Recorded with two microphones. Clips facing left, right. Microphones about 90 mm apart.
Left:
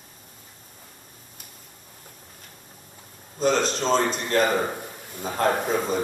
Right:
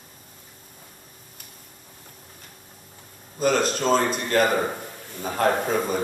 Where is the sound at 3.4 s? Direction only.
5° right (ahead or behind).